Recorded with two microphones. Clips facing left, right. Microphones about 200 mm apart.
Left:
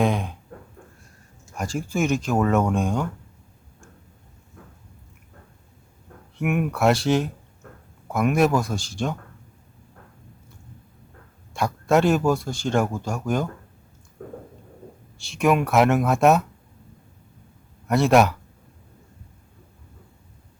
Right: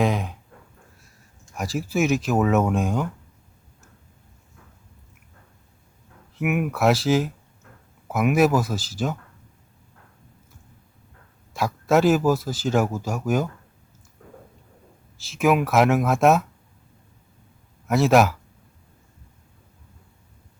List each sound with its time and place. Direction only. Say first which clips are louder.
0.0 s speech: even; centre (ahead or behind)
1.5 s speech: right 1 dB; 5° right (ahead or behind)
6.3 s speech: even; 5° right (ahead or behind)
11.5 s speech: even; centre (ahead or behind)
14.2 s a sound: left 10 dB; 55° left (ahead or behind)
15.2 s speech: even; centre (ahead or behind)
17.8 s speech: even; centre (ahead or behind)